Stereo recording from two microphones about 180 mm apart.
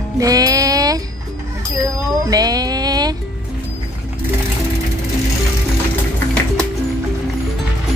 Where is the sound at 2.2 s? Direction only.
20° right (ahead or behind).